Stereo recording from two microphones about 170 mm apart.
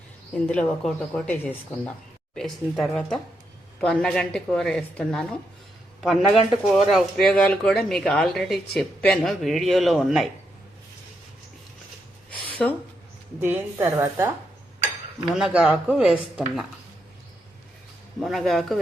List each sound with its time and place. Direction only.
0.4 s speech: 5° left (ahead or behind)
12.3 s a sound: 30° left (ahead or behind)
13.4 s a woman's voice: 15° right (ahead or behind)
15.3 s speech: centre (ahead or behind)
18.2 s speech: centre (ahead or behind)